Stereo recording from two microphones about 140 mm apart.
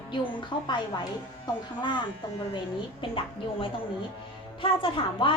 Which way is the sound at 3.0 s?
40° left (ahead or behind).